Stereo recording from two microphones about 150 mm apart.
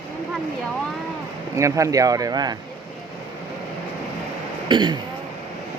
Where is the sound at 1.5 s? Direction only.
20° right (ahead or behind).